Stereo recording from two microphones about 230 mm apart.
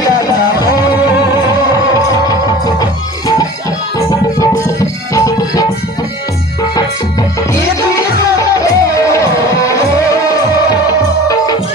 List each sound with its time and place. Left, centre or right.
0.2 s music: centre
2.2 s music: centre
8.4 s music: centre